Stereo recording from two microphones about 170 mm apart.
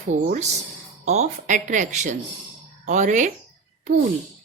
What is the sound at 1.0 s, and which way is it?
Speech, 40° right (ahead or behind).